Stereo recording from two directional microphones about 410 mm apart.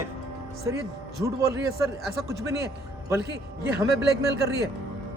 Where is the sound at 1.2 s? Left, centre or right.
Centre.